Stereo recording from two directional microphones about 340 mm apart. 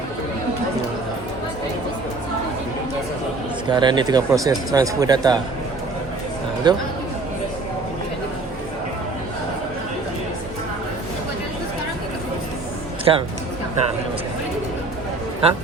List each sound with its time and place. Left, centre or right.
3.7 s speech: centre
6.7 s speech: centre
13.1 s speech: centre
15.4 s speech: centre